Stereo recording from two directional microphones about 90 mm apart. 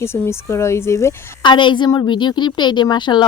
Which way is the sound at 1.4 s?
60° left (ahead or behind).